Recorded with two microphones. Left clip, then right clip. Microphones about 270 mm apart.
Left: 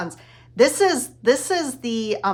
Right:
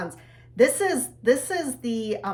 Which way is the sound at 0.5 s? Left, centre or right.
Left.